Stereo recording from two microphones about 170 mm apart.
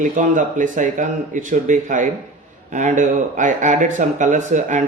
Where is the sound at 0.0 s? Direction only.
50° right (ahead or behind).